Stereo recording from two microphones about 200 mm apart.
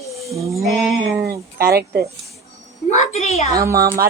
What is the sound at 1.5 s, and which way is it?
Speech, 50° right (ahead or behind).